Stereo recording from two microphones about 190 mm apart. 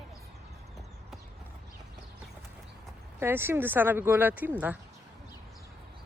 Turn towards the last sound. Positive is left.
turn(degrees=-10)  # may be behind; listen again after turning